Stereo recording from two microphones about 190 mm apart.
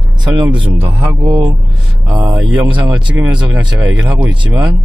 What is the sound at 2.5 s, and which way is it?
Speech, 10° right (ahead or behind).